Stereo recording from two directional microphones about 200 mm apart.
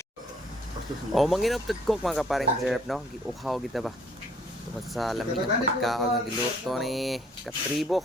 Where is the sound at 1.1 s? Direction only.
Centre (ahead or behind).